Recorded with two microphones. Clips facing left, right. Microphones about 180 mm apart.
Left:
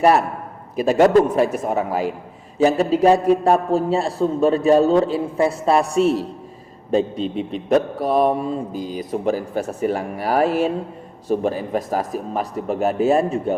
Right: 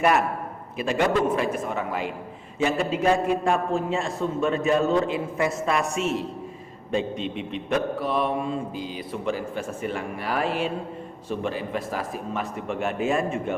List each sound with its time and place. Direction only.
0.0 s mantra: 35° left (ahead or behind)